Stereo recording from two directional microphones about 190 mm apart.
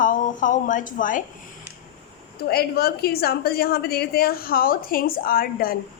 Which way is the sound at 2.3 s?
55° left (ahead or behind).